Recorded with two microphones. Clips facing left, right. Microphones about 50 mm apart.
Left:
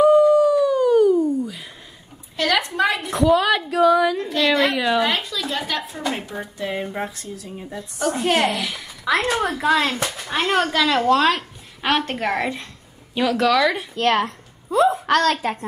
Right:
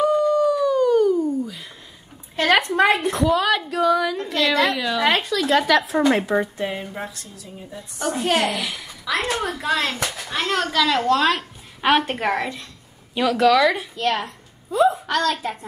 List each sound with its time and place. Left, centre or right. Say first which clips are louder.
0.0 s busy signal: left 5 dB; centre
2.3 s a sound: right 3 dB; right
3.1 s a woman's voice: left 2 dB; centre
4.7 s a child's voice: left 4 dB; left
5.0 s speech: right 3 dB; right
8.0 s a woman's voice: left 1 dB; centre
9.0 s a child's voice: left 3 dB; left
9.5 s speech: left 4 dB; centre
10.3 s a woman's voice: left 2 dB; centre
13.9 s a woman's voice: left 4 dB; left